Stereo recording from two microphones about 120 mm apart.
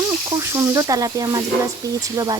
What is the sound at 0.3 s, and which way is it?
Speech, 25° right (ahead or behind).